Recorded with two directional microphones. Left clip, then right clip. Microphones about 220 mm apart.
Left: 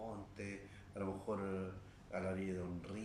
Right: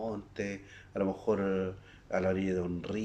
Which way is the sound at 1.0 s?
45° right (ahead or behind).